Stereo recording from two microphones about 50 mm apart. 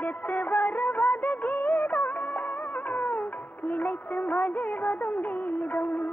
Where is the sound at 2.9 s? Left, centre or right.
Left.